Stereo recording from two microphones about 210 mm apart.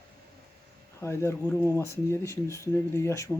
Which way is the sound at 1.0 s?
10° left (ahead or behind).